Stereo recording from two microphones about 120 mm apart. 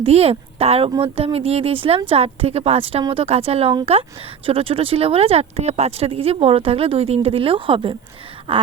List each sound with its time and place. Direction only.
0.0 s a woman's voice: 60° right (ahead or behind)